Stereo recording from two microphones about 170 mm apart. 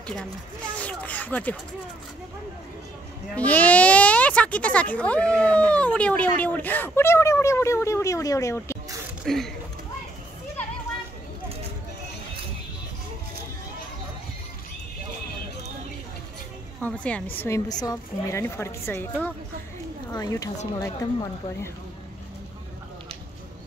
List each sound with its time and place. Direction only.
0.0 s speech: 5° left (ahead or behind)
3.3 s speech: 10° left (ahead or behind)
9.2 s speech: centre (ahead or behind)
16.8 s speech: 10° left (ahead or behind)
17.6 s a woman's voice: 20° left (ahead or behind)